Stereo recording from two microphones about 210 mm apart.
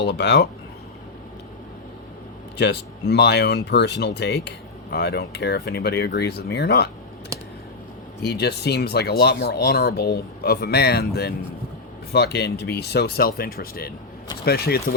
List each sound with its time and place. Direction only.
0.0 s speech: 55° left (ahead or behind)
2.6 s speech: 50° left (ahead or behind)
8.2 s speech: 50° left (ahead or behind)